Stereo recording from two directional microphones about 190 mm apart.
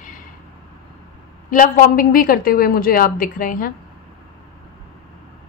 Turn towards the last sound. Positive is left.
turn(degrees=45)  # may be behind; listen again after turning